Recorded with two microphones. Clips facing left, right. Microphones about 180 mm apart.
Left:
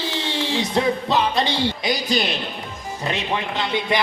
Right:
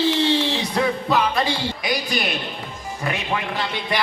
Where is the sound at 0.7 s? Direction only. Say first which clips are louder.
Left 1 dB; 20° left (ahead or behind).